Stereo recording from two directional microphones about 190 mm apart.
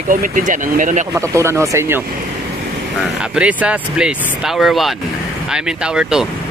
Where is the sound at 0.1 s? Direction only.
45° right (ahead or behind).